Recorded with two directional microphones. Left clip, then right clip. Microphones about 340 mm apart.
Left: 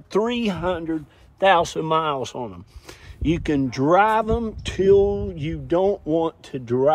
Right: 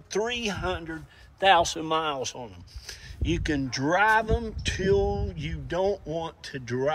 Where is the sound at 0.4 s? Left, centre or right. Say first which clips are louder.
Left 6 dB; left.